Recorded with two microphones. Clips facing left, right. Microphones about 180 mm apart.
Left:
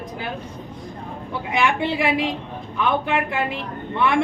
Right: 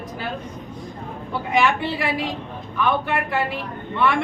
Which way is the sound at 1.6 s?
20° left (ahead or behind).